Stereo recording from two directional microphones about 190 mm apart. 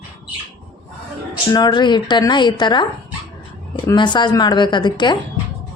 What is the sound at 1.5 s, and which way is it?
A woman's voice, 20° left (ahead or behind).